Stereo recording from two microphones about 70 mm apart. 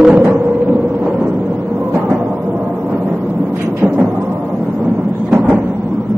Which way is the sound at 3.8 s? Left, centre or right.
Centre.